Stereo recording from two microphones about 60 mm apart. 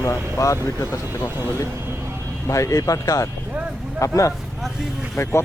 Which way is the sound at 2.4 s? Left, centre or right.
Left.